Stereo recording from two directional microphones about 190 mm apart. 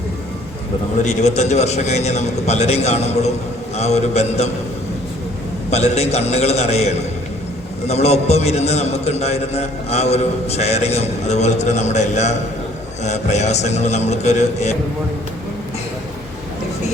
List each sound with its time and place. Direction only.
1.0 s a man's voice: 35° left (ahead or behind)
5.7 s a man's voice: 35° left (ahead or behind)